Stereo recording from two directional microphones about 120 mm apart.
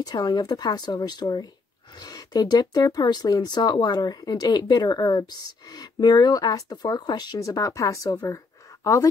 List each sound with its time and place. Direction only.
0.0 s speech: 35° left (ahead or behind)